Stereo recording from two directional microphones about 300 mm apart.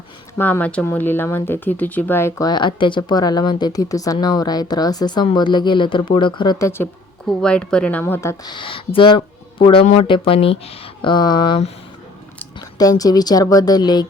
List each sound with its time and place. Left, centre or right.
0.3 s speech: centre